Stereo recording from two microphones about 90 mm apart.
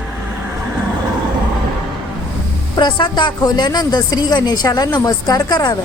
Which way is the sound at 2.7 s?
60° left (ahead or behind).